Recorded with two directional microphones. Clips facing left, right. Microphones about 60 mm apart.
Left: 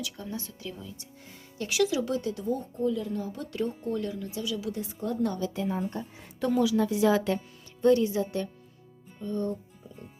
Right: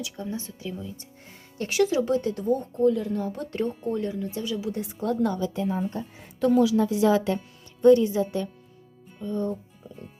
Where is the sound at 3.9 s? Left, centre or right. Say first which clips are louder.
Right 3 dB; right.